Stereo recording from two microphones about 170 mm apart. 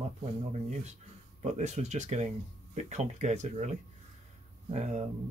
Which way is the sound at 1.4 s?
40° right (ahead or behind).